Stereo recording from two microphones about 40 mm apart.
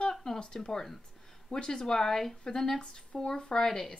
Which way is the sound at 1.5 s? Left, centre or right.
Left.